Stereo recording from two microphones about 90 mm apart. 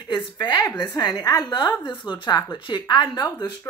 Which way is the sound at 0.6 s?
45° left (ahead or behind).